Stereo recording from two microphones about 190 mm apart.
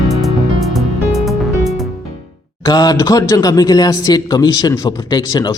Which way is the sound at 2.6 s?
20° left (ahead or behind).